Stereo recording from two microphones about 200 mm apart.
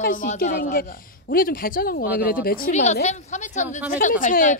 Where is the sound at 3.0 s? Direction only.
35° left (ahead or behind).